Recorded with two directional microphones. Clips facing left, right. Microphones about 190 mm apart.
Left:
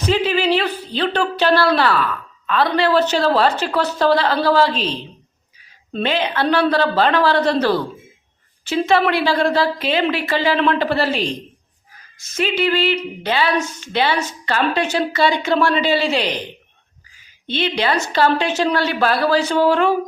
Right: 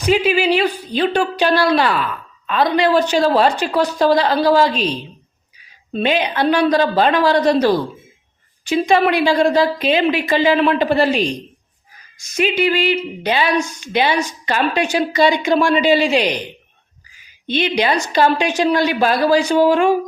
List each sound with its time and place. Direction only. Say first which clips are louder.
0.0 s a woman's voice: right 2 dB; 10° right (ahead or behind)
17.4 s speech: right 3 dB; 15° right (ahead or behind)